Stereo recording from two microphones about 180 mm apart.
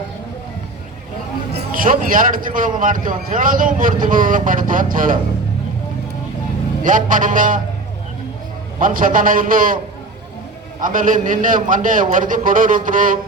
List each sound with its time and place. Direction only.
1.7 s a man's voice: 50° right (ahead or behind)
6.8 s a man's voice: 45° right (ahead or behind)
8.8 s a man's voice: 50° right (ahead or behind)
10.8 s a man's voice: 45° right (ahead or behind)